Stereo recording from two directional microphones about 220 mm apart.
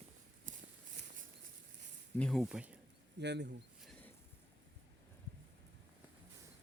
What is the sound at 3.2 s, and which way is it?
Speech, 50° right (ahead or behind).